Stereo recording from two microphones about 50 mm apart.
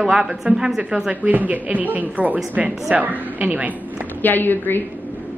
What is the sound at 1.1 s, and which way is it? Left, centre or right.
A woman's voice, right.